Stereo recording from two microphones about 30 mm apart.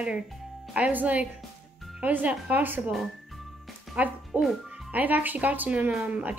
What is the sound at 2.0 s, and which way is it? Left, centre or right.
Speech, right.